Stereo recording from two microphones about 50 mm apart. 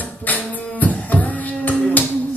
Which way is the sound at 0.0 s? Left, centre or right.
Left.